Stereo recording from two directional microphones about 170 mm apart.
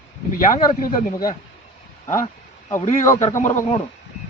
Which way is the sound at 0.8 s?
55° left (ahead or behind).